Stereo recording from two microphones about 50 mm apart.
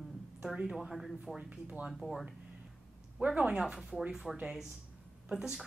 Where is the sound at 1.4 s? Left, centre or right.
Centre.